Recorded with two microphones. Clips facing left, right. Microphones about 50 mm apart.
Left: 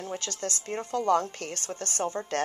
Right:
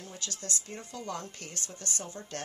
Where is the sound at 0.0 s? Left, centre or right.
Left.